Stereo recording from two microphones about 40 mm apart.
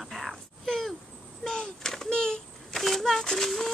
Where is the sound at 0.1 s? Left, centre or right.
Centre.